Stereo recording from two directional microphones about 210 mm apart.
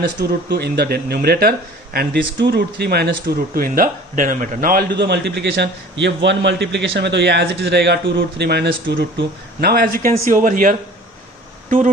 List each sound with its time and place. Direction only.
0.2 s a man's voice: 50° right (ahead or behind)